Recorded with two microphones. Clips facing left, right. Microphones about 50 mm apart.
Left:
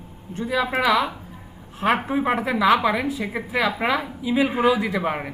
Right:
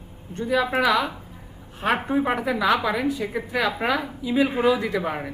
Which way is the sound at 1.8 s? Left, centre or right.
Centre.